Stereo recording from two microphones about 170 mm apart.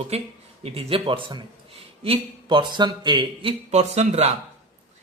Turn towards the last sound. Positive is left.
turn(degrees=-40)  # may be behind; listen again after turning